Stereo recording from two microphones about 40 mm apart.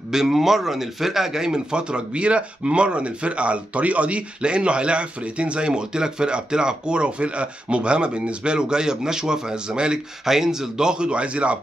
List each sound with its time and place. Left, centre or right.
0.1 s speech: centre
10.2 s speech: centre; by 11.5 s right